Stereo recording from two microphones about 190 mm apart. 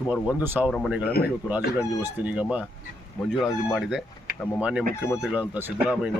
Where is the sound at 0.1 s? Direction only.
10° right (ahead or behind).